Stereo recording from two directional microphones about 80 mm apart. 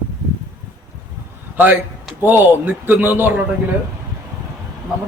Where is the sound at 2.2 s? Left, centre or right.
Right.